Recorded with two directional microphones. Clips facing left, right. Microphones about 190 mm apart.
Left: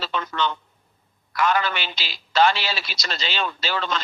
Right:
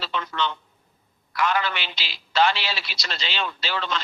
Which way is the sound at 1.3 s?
45° left (ahead or behind).